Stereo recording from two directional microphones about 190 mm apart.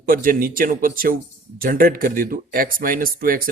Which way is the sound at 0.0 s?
50° right (ahead or behind).